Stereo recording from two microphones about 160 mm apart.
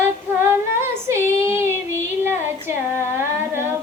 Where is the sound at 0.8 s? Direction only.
15° right (ahead or behind).